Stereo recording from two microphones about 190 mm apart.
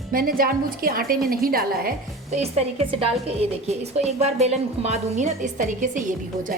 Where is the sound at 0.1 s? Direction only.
50° right (ahead or behind).